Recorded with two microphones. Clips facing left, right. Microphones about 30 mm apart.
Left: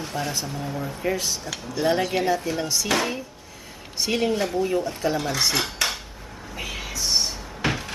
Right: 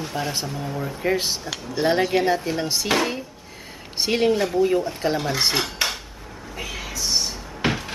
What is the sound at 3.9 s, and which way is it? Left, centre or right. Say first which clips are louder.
Speech: right 3 dB; right.